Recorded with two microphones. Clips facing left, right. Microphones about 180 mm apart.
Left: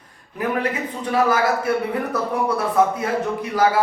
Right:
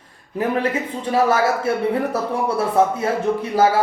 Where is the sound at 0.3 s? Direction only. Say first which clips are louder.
Right 2 dB; 30° right (ahead or behind).